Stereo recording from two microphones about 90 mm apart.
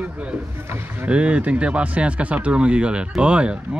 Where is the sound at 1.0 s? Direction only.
10° right (ahead or behind).